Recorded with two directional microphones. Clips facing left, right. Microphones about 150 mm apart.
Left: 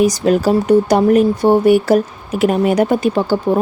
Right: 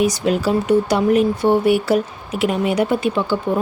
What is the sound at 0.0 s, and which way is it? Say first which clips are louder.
Speech: left 4 dB; 40° left (ahead or behind).